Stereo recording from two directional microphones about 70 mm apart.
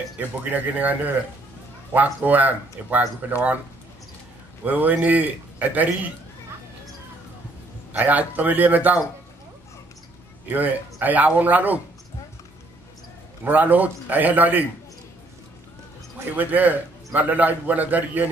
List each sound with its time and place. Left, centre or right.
0.2 s a man's voice: right
2.2 s a man's voice: right
4.6 s a man's voice: right
7.9 s a man's voice: right
10.5 s a man's voice: right
13.4 s a man's voice: right
16.3 s a man's voice: right